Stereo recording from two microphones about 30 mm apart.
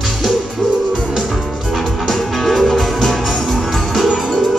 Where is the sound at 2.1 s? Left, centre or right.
Centre.